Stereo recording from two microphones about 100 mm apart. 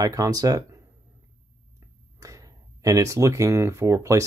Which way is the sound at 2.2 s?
35° right (ahead or behind).